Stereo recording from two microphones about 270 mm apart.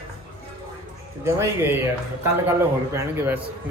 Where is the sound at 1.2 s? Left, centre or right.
Centre.